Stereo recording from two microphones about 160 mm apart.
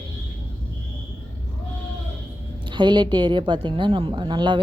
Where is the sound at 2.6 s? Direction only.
30° right (ahead or behind).